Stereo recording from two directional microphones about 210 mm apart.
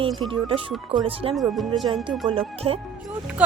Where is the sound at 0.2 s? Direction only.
25° right (ahead or behind).